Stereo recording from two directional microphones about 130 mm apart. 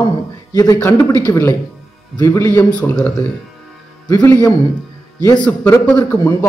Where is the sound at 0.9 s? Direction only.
30° left (ahead or behind).